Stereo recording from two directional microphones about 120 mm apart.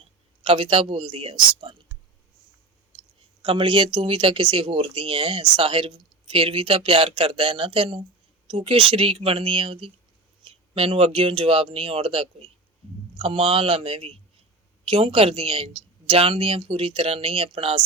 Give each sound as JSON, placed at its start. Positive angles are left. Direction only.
{"t": 0.0, "sound": "a man's voice", "side_deg": -45}
{"t": 3.4, "sound": "speech", "side_deg": -45}